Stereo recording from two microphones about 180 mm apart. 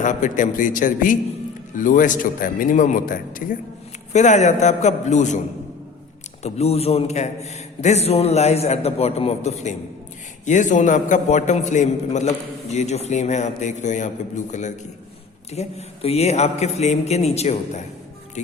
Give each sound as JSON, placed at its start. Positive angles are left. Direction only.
{"t": 0.0, "sound": "a man's voice", "side_deg": 45}
{"t": 6.4, "sound": "a man's voice", "side_deg": 35}
{"t": 15.5, "sound": "a man's voice", "side_deg": 35}